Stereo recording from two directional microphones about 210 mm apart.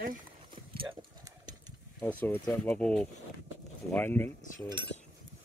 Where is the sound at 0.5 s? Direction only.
25° right (ahead or behind).